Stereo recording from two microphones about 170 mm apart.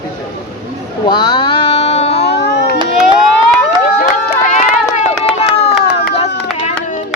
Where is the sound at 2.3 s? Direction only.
80° left.